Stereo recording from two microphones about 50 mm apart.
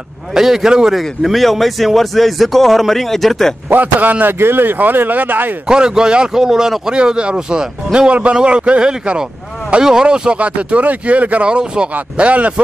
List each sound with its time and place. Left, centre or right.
0.3 s a man's voice: centre
0.9 s speech: centre
3.7 s a man's voice: right
5.7 s a man's voice: centre